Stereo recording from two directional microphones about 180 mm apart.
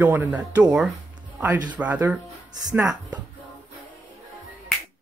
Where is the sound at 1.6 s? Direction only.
10° right (ahead or behind).